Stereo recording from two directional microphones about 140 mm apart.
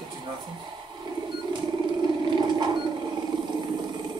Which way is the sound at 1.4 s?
30° right (ahead or behind).